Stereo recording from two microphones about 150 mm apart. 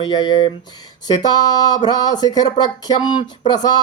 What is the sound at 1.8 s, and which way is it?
Speech, 25° left (ahead or behind).